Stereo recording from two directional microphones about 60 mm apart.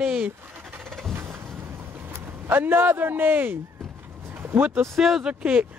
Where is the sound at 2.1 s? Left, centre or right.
Right.